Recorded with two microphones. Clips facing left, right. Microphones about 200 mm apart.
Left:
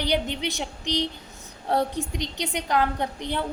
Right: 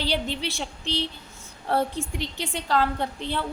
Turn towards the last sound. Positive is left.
turn(degrees=15)  # may be behind; listen again after turning